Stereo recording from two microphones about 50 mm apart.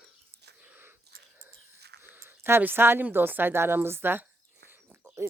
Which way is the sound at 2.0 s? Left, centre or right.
Right.